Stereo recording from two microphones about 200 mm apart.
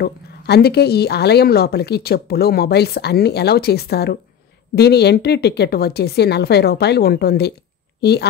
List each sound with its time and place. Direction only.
0.0 s a woman's voice: 55° left (ahead or behind)